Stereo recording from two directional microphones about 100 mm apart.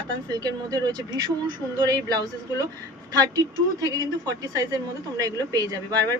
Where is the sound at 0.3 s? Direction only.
40° right (ahead or behind).